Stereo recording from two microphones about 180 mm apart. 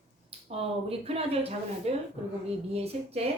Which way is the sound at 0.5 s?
35° right (ahead or behind).